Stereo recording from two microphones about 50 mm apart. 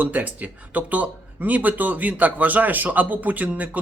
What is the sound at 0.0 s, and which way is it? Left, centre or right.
Speech, right.